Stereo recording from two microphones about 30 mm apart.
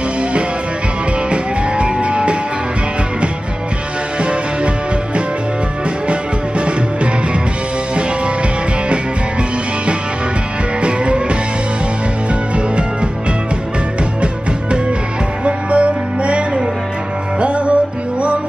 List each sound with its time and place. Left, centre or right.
1.3 s music: right
10.8 s music: right
15.4 s music: right